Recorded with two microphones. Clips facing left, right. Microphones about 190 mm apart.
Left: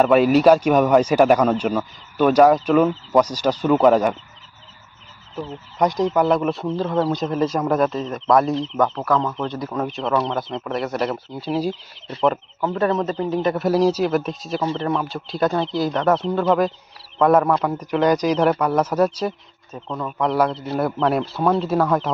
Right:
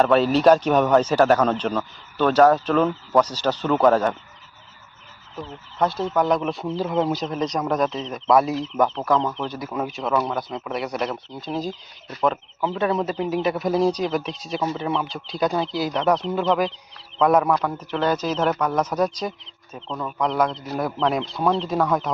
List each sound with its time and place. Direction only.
0.0 s a man's voice: 10° left (ahead or behind)
5.5 s a man's voice: 15° left (ahead or behind)
6.7 s speech: 10° right (ahead or behind)
7.2 s speech: 5° left (ahead or behind)
11.7 s speech: 30° left (ahead or behind)
12.2 s a man's voice: 5° left (ahead or behind)